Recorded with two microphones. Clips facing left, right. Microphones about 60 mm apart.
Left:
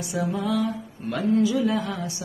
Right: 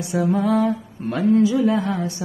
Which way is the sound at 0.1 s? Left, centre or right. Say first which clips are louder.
Right 6 dB; right.